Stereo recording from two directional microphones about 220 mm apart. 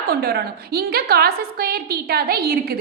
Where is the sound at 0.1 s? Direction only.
45° right (ahead or behind).